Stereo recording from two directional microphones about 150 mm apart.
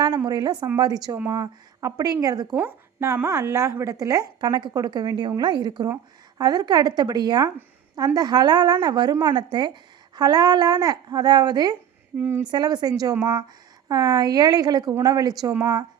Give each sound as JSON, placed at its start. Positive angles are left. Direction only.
{"t": 0.3, "sound": "a woman's voice", "side_deg": -25}
{"t": 12.1, "sound": "speech", "side_deg": -10}
{"t": 12.5, "sound": "a woman's voice", "side_deg": -25}